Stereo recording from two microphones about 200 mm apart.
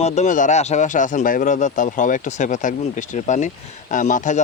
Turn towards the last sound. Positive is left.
turn(degrees=40)  # may be behind; listen again after turning